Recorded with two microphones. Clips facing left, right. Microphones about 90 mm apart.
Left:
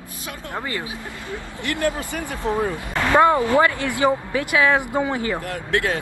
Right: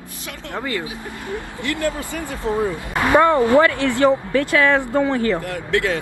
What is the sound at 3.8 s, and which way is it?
Speech, 15° left (ahead or behind).